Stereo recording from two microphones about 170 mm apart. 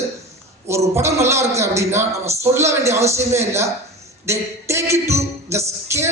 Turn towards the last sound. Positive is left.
turn(degrees=-15)  # may be behind; listen again after turning